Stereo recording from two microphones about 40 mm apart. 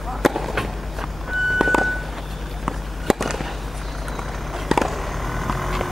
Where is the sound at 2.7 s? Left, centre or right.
Centre.